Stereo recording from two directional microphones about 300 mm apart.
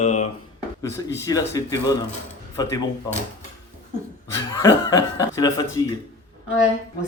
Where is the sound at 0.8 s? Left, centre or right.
Centre.